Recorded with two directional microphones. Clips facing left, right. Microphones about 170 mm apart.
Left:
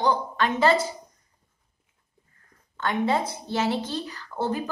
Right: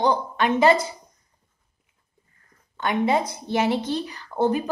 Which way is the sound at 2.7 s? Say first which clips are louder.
Right 3 dB; 15° right (ahead or behind).